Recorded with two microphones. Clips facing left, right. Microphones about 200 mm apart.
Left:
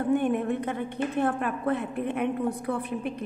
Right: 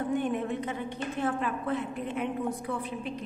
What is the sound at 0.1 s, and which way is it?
A woman's voice, 55° left (ahead or behind).